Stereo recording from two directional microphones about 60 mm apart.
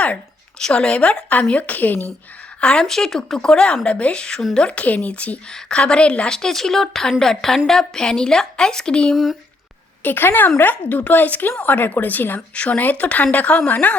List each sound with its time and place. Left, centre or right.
0.7 s speech: centre
2.6 s speech: centre
2.8 s a woman's voice: centre
10.0 s speech: left